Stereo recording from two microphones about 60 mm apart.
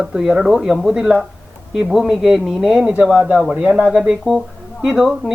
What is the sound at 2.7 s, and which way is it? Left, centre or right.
Speech, right.